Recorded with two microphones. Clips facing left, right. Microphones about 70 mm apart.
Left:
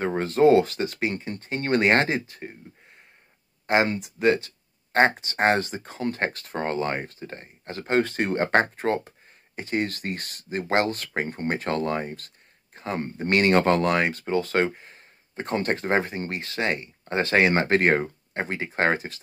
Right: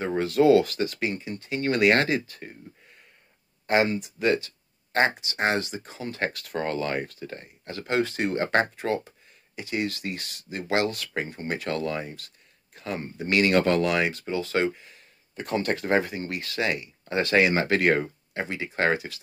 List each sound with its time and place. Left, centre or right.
0.1 s speech: left
1.1 s speech: left
3.6 s speech: left